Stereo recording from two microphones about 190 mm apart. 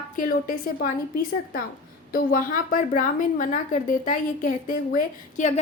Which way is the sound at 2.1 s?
50° left (ahead or behind).